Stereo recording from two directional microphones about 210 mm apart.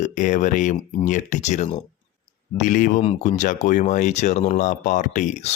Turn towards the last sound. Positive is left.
turn(degrees=35)  # may be behind; listen again after turning